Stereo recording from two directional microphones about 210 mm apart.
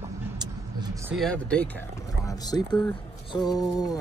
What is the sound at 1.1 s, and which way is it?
Speech, 5° left (ahead or behind).